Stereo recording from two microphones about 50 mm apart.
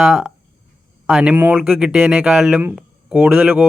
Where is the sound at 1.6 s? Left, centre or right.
Centre.